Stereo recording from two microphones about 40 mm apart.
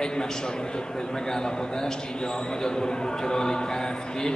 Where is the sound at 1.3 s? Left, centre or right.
Centre.